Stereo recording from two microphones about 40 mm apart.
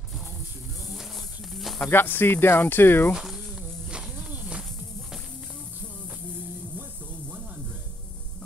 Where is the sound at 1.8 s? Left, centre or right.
Left.